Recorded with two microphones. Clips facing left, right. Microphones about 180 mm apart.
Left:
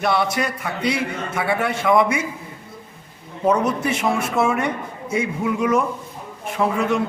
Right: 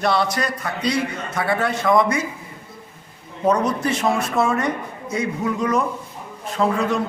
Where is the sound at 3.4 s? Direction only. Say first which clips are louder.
Even; 10° left (ahead or behind).